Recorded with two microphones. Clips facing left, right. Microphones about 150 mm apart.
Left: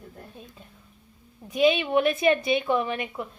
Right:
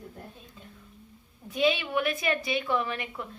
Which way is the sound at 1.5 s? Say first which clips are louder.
Left 5 dB; 20° left (ahead or behind).